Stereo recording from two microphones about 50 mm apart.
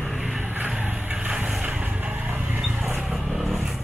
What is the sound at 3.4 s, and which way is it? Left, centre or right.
Vehicle, centre.